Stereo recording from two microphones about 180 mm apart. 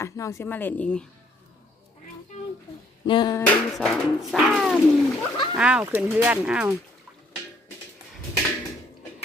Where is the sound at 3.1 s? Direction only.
25° left (ahead or behind).